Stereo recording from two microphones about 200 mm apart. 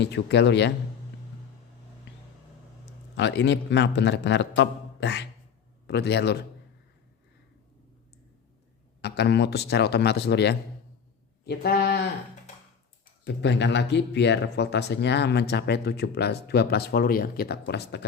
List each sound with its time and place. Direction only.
0.0 s speech: 60° left (ahead or behind)
3.2 s speech: 60° left (ahead or behind)
9.0 s speech: 55° left (ahead or behind)
13.2 s speech: 60° left (ahead or behind)